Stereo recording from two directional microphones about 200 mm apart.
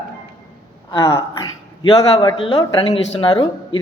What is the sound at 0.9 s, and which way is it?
A man's voice, 15° left (ahead or behind).